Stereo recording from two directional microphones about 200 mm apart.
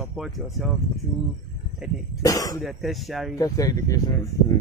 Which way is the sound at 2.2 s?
15° left (ahead or behind).